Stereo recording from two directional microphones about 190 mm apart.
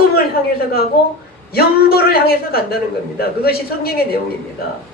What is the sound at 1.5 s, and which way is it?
A woman's voice, 55° left (ahead or behind).